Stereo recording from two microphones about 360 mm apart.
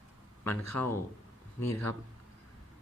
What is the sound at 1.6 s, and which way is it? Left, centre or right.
Speech, left.